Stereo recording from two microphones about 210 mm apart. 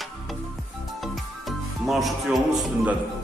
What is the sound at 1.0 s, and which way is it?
Music, centre (ahead or behind).